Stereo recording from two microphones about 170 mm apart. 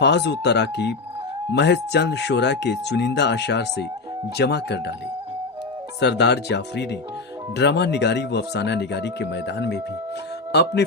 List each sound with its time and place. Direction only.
0.0 s speech: 90° left
6.0 s speech: 85° left